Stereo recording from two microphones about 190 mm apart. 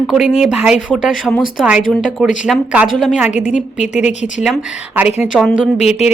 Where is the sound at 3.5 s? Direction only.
40° left (ahead or behind).